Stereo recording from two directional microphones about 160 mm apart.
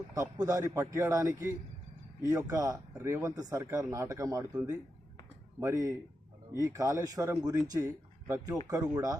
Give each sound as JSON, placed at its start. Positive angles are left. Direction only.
{"t": 0.1, "sound": "speech", "side_deg": -20}